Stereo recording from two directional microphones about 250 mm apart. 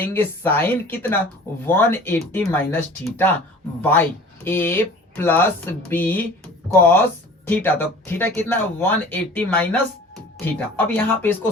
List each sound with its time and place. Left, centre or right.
0.0 s speech: centre